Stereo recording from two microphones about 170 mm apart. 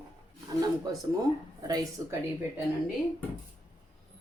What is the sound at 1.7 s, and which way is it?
Speech, 20° right (ahead or behind).